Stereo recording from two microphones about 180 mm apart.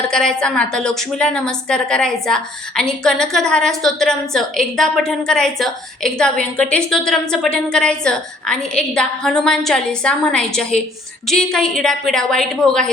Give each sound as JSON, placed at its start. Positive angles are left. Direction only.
{"t": 0.1, "sound": "a woman's voice", "side_deg": 5}